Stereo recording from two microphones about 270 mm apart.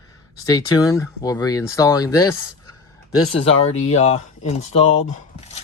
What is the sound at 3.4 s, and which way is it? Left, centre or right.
Speech, left.